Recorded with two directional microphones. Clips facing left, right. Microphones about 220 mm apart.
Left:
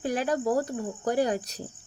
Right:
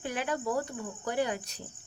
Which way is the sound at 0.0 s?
40° left (ahead or behind).